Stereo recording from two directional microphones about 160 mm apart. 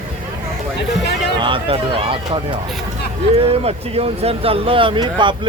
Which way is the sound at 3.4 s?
40° right (ahead or behind).